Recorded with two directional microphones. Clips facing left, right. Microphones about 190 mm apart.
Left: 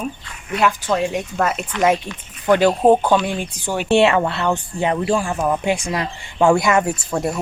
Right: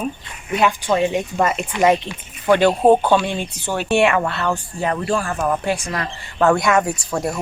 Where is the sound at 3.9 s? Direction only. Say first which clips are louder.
Left 2 dB; 25° left (ahead or behind); by 7.4 s 5° left (ahead or behind).